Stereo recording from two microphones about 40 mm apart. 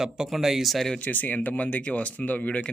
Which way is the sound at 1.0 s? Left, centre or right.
Left.